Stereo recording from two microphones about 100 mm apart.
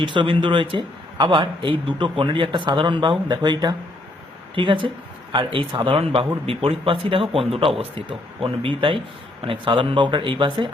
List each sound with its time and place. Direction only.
0.0 s a man's voice: 55° right (ahead or behind)